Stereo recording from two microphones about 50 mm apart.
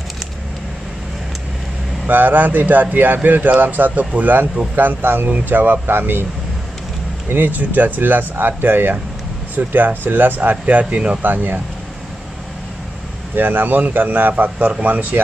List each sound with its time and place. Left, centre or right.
2.0 s speech: right
7.2 s speech: right
11.2 s speech: right
13.4 s speech: right